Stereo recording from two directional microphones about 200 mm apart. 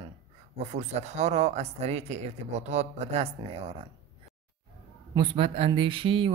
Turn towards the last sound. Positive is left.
turn(degrees=-25)  # may be behind; listen again after turning